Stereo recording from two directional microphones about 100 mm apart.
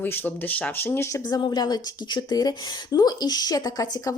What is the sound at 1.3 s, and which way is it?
A woman's voice, 45° left (ahead or behind).